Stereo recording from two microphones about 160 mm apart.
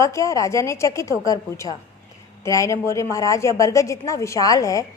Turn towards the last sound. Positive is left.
turn(degrees=20)  # may be behind; listen again after turning